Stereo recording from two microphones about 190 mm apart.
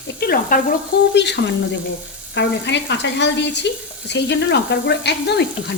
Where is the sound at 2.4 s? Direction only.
65° left (ahead or behind).